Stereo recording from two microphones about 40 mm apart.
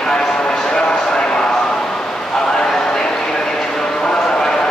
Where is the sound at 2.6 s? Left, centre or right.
Centre.